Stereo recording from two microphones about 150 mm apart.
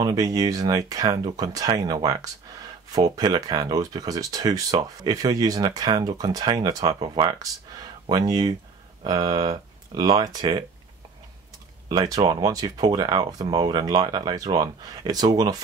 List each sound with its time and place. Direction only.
0.0 s speech: 25° right (ahead or behind)
11.9 s speech: 25° right (ahead or behind)